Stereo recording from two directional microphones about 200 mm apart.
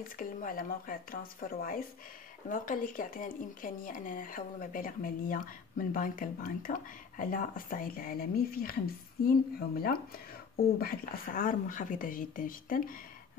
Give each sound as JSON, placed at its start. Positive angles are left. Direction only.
{"t": 0.2, "sound": "speech", "side_deg": 45}